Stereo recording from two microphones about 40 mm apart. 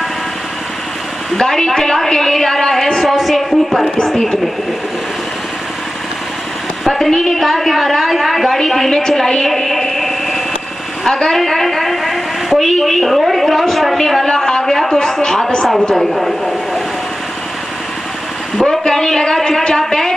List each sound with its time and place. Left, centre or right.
1.4 s a woman's voice: centre
6.8 s a sound: centre
7.1 s a woman's voice: centre
7.3 s a woman's voice: centre
14.2 s a sound: centre
15.9 s a woman's voice: centre
18.7 s speech: centre